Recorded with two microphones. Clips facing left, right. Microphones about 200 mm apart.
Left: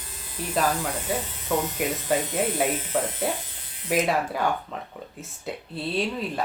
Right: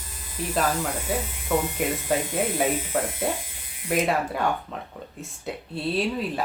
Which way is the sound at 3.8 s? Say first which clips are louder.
Even; 5° left (ahead or behind).